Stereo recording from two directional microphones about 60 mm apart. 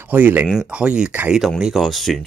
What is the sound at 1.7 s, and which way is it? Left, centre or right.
Speech, centre.